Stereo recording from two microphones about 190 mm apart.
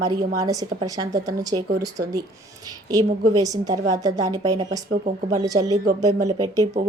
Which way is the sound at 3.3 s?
20° right (ahead or behind).